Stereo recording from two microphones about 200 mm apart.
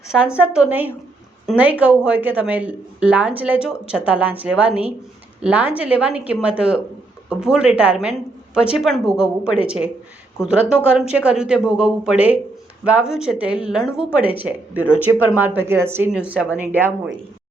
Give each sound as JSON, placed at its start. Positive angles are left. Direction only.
{"t": 0.3, "sound": "a woman's voice", "side_deg": -5}
{"t": 14.8, "sound": "speech", "side_deg": 10}
{"t": 15.4, "sound": "a woman's voice", "side_deg": -10}